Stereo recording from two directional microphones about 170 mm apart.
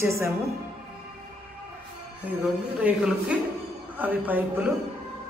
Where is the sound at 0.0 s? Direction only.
15° right (ahead or behind).